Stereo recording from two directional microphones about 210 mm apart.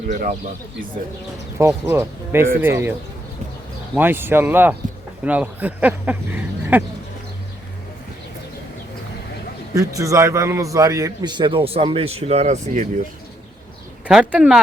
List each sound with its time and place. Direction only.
0.1 s speech: 40° right (ahead or behind)
1.5 s speech: 10° right (ahead or behind)
3.9 s speech: 10° right (ahead or behind)
9.7 s a man's voice: 15° right (ahead or behind); by 12.9 s 35° right (ahead or behind)
14.1 s speech: 5° right (ahead or behind)